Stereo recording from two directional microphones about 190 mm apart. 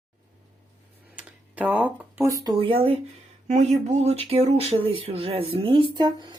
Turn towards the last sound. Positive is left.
turn(degrees=-25)  # may be behind; listen again after turning